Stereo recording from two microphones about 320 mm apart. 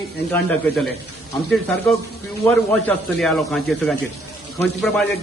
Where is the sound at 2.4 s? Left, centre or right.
Centre.